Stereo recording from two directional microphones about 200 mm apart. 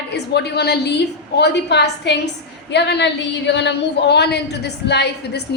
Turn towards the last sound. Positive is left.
turn(degrees=55)  # may be behind; listen again after turning